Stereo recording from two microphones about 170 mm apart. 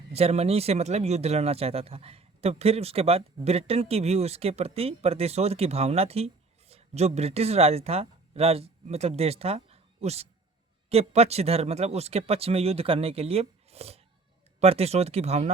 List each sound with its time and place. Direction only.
0.1 s speech: 40° right (ahead or behind)